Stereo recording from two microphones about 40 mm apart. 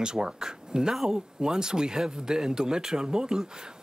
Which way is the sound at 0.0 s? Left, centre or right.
Centre.